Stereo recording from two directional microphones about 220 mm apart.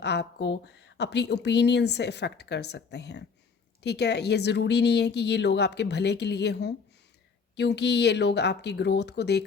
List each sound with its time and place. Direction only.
0.0 s speech: 50° left (ahead or behind)